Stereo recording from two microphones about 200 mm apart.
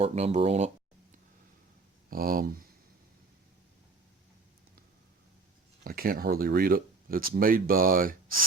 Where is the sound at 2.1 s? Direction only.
45° right (ahead or behind).